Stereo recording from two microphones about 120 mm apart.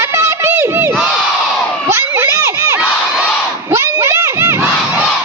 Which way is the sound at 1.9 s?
20° right (ahead or behind).